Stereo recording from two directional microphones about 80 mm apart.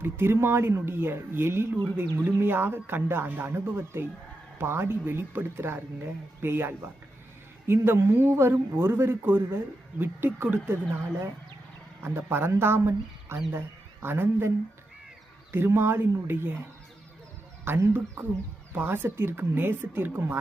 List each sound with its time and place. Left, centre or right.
0.0 s speech: right
15.5 s speech: right
17.7 s speech: right